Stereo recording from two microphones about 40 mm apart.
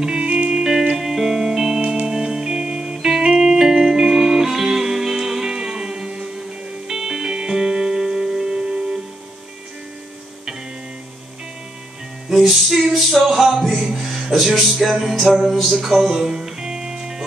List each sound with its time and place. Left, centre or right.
0.0 s music: right
12.3 s music: centre
14.3 s music: centre